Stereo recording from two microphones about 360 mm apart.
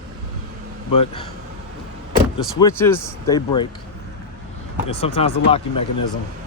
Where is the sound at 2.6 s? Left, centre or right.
Centre.